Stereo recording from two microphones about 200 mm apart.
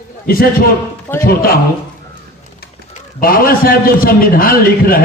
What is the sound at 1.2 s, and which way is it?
Speech, 45° left (ahead or behind).